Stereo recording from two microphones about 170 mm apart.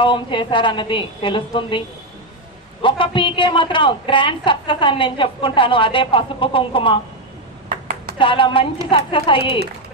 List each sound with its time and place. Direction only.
0.0 s a woman's voice: 30° left (ahead or behind)
2.8 s a woman's voice: 30° left (ahead or behind)
8.2 s a woman's voice: 30° left (ahead or behind)